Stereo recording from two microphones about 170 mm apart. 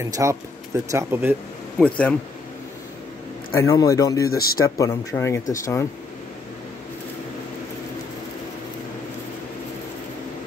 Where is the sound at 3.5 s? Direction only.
20° left (ahead or behind).